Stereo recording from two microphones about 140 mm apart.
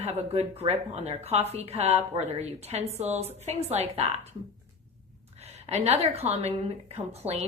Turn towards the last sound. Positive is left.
turn(degrees=-50)  # may be behind; listen again after turning